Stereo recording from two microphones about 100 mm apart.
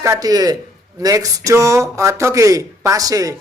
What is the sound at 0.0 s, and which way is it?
Speech, 35° right (ahead or behind).